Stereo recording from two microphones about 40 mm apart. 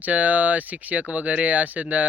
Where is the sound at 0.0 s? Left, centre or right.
Right.